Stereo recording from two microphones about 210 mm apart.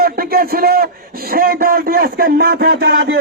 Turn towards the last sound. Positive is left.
turn(degrees=-65)  # may be behind; listen again after turning